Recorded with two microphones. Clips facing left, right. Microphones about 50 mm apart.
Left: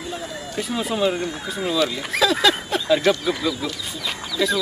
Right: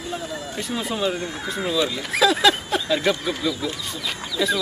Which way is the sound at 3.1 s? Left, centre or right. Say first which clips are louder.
Left 2 dB; centre.